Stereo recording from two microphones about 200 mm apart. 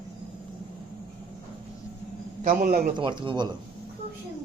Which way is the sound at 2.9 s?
25° right (ahead or behind).